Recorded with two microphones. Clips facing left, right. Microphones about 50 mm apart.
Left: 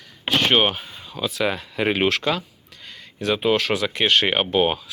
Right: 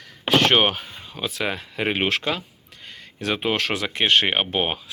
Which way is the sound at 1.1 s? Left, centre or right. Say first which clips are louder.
Left 3 dB; right.